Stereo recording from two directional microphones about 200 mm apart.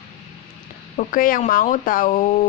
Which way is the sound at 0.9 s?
45° left (ahead or behind).